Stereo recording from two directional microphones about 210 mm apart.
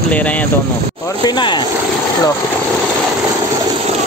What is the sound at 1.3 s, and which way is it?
Speech, 20° left (ahead or behind).